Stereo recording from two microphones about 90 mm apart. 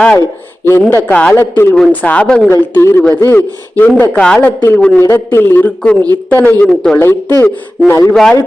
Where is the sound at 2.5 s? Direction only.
25° left (ahead or behind).